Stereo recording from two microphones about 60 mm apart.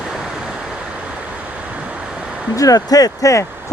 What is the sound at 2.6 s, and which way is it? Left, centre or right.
Speech, left.